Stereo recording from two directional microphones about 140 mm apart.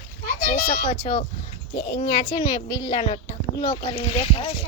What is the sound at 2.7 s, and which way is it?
Speech, 25° left (ahead or behind).